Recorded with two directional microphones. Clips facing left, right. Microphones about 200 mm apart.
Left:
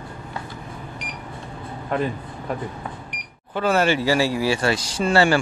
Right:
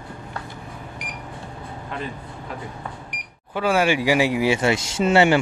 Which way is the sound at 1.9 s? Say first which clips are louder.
Left 9 dB; 50° left (ahead or behind).